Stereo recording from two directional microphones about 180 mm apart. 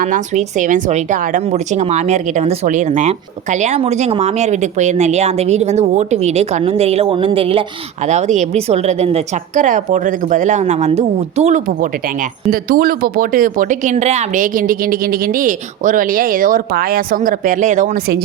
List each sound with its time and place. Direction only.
0.0 s a woman's voice: 45° right (ahead or behind)
8.0 s a woman's voice: 40° right (ahead or behind)
12.5 s speech: 55° right (ahead or behind)